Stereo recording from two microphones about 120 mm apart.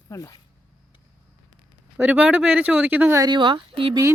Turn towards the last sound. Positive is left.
turn(degrees=-50)  # may be behind; listen again after turning